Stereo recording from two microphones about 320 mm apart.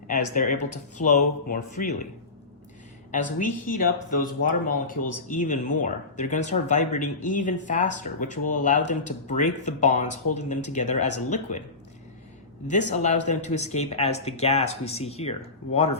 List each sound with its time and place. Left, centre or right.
0.1 s speech: left
3.1 s speech: left
12.6 s speech: left